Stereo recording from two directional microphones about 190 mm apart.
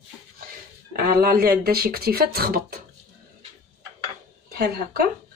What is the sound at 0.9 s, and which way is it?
A woman's voice, 50° right (ahead or behind).